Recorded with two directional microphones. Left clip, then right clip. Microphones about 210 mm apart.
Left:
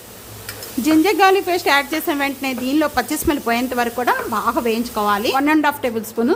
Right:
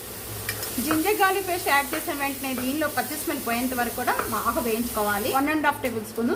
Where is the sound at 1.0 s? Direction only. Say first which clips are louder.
Left 7 dB; 50° left (ahead or behind).